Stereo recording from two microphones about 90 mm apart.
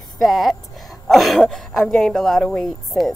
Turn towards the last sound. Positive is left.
turn(degrees=0)  # may be behind; listen again after turning